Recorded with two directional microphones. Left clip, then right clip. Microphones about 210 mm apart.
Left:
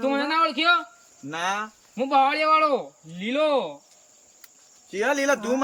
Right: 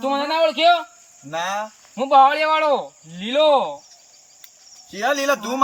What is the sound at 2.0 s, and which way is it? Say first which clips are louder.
Speech: right 7 dB; 15° right (ahead or behind).